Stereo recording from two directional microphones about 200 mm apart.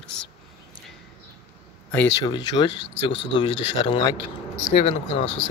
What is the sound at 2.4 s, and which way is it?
Speech, 25° left (ahead or behind).